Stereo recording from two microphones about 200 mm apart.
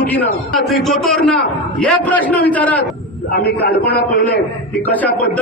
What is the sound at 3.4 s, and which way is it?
A man's voice, 55° left (ahead or behind).